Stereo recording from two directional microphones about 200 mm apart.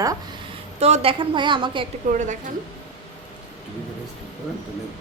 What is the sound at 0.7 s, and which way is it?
A woman's voice, 35° right (ahead or behind).